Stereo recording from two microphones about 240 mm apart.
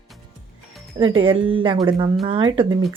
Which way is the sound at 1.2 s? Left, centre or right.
Right.